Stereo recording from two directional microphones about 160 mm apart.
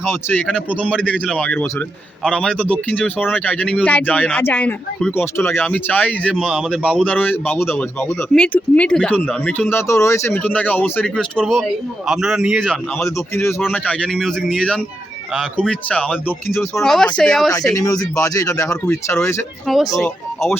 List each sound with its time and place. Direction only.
0.0 s a man's voice: 15° left (ahead or behind)
6.3 s a man's voice: 5° right (ahead or behind)
13.1 s a man's voice: 20° left (ahead or behind)
17.7 s speech: 20° left (ahead or behind)
19.6 s speech: centre (ahead or behind)